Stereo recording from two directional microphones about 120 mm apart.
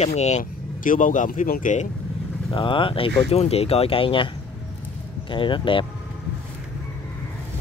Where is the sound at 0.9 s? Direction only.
90° left.